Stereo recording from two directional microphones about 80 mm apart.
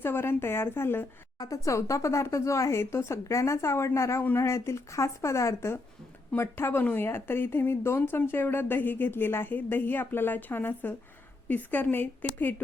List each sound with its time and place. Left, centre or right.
0.0 s speech: left
1.4 s speech: left